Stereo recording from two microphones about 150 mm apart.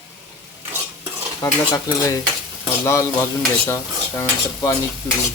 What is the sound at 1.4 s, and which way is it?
Speech, 20° left (ahead or behind).